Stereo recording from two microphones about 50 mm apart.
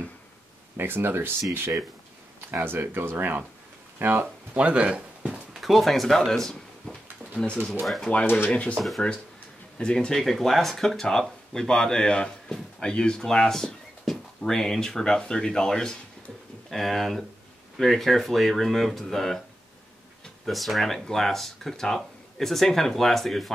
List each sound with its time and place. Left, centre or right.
0.7 s speech: right
4.6 s speech: right
5.5 s a sound: centre
7.8 s speech: centre
8.5 s speech: left
8.7 s speech: centre
9.8 s speech: centre
16.7 s speech: centre
20.4 s speech: centre